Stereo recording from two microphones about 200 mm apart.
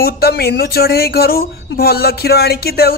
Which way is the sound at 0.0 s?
50° left (ahead or behind).